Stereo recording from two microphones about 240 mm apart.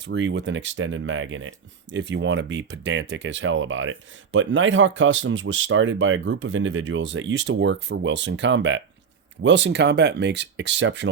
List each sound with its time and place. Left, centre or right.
0.0 s speech: right